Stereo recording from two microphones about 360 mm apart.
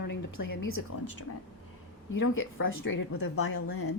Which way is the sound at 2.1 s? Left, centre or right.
Left.